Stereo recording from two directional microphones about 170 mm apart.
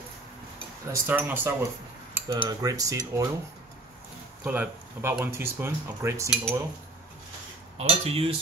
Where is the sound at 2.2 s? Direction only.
25° right (ahead or behind).